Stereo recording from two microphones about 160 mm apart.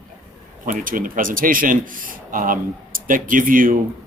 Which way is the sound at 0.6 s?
55° right (ahead or behind).